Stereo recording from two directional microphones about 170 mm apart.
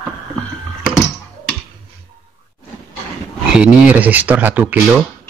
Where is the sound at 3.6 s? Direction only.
10° right (ahead or behind).